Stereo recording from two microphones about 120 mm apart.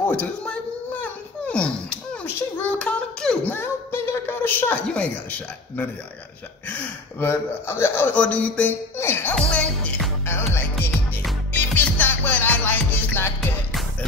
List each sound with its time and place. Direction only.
0.1 s a child's voice: 10° left (ahead or behind)
1.0 s a sound: 10° left (ahead or behind)
6.7 s a man's voice: 15° left (ahead or behind)
10.2 s music: 20° left (ahead or behind)